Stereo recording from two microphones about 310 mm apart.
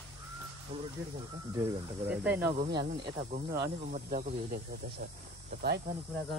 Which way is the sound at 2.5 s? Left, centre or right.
Right.